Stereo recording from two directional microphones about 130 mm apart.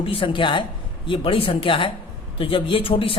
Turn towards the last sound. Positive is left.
turn(degrees=45)  # may be behind; listen again after turning